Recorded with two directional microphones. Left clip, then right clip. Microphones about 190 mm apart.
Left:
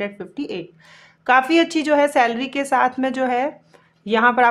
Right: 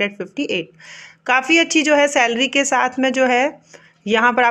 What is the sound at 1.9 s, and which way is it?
Speech, 10° right (ahead or behind).